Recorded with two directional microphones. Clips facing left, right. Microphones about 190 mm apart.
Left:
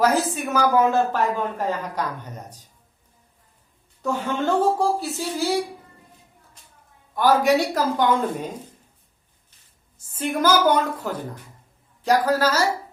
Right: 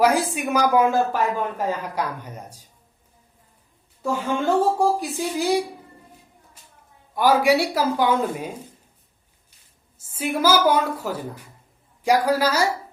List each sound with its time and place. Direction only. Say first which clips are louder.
0.0 s a woman's voice: right 1 dB; 10° right (ahead or behind)
4.0 s a woman's voice: right 1 dB; 10° right (ahead or behind)
6.6 s a sound: right 1 dB; 5° right (ahead or behind)
7.1 s a woman's voice: even; 10° right (ahead or behind)
10.2 s a woman's voice: even; 5° right (ahead or behind)